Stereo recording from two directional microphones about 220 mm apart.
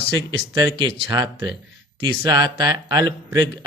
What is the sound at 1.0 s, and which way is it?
Speech, 15° right (ahead or behind).